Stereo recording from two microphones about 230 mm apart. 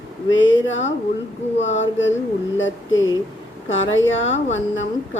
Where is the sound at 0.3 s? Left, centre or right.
Left.